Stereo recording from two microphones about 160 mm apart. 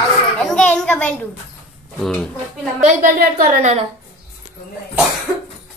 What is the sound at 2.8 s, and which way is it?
Speech, 60° right (ahead or behind).